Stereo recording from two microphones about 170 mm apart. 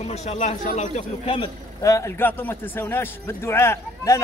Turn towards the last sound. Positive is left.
turn(degrees=15)  # may be behind; listen again after turning